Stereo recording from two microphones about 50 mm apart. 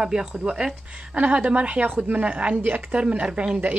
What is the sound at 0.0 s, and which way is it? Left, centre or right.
Speech, centre.